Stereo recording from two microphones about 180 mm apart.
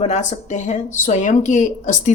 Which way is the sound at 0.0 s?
40° left (ahead or behind).